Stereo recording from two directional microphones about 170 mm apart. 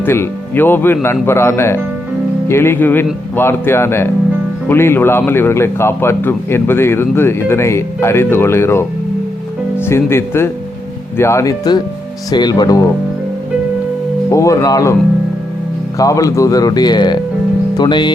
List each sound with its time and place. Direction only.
0.0 s a man's voice: 15° left (ahead or behind)
14.3 s speech: 20° left (ahead or behind)
16.0 s speech: 20° left (ahead or behind)